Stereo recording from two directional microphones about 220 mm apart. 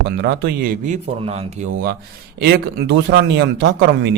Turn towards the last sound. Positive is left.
turn(degrees=-50)  # may be behind; listen again after turning